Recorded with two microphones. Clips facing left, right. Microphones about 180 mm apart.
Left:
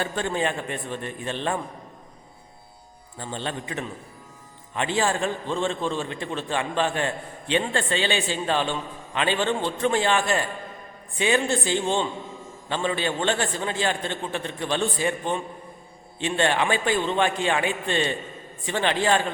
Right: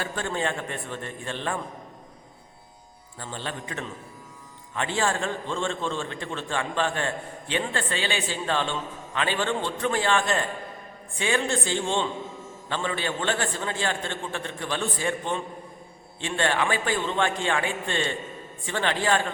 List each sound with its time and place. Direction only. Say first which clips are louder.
0.0 s a man's voice: left 3 dB; 20° left (ahead or behind)
3.2 s a man's voice: left 3 dB; 20° left (ahead or behind)